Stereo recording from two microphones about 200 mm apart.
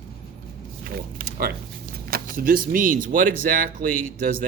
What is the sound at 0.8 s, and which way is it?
A man's voice, 50° right (ahead or behind).